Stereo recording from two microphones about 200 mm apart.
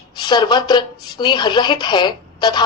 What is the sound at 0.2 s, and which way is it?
A woman's voice, 20° left (ahead or behind).